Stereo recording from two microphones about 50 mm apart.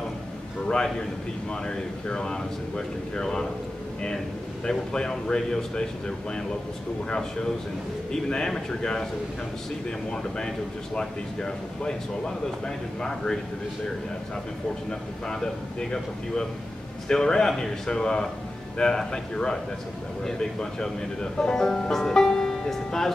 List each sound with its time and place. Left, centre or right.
0.7 s speech: centre
4.6 s speech: centre
14.9 s speech: centre